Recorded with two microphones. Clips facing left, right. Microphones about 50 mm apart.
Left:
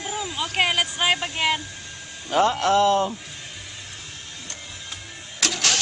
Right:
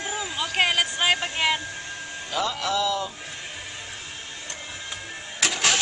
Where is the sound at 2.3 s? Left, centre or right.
Left.